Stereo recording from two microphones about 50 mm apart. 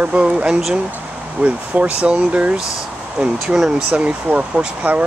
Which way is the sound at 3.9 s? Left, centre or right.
Right.